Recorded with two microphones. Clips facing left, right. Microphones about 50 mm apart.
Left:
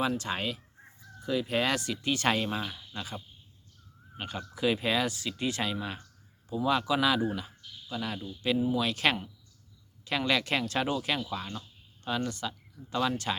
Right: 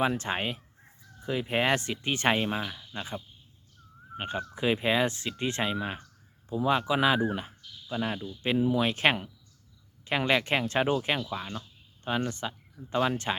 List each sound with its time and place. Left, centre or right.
0.0 s speech: right
2.6 s speech: centre
2.9 s speech: right
4.2 s speech: right
7.9 s speech: right
8.4 s speech: right
8.8 s speech: right
11.3 s speech: centre
12.0 s speech: right